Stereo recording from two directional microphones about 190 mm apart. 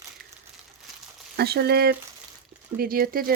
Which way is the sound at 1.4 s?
55° right (ahead or behind).